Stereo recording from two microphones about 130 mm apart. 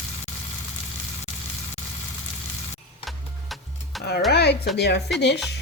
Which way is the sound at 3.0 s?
Centre (ahead or behind).